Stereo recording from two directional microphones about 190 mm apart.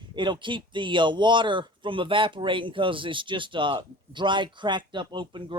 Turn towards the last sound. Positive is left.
turn(degrees=-25)  # may be behind; listen again after turning